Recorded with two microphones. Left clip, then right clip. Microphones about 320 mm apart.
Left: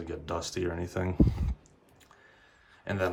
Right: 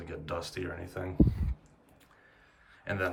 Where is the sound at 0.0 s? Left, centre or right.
Centre.